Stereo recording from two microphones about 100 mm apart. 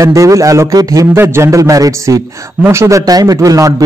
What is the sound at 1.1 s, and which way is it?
A man's voice, 25° right (ahead or behind).